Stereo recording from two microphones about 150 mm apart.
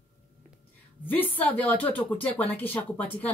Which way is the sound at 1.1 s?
10° left (ahead or behind).